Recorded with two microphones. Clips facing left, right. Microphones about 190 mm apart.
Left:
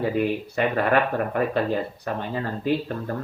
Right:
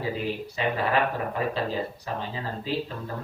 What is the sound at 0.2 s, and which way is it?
Speech, 60° left (ahead or behind).